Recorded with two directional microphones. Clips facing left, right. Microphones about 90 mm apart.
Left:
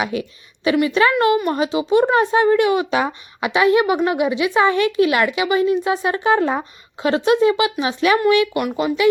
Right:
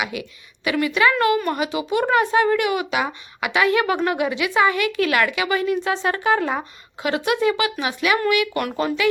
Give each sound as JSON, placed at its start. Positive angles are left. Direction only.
{"t": 0.0, "sound": "speech", "side_deg": 35}
{"t": 8.5, "sound": "speech", "side_deg": 10}